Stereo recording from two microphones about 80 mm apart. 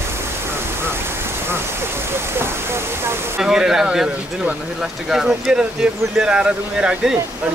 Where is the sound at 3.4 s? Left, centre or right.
Centre.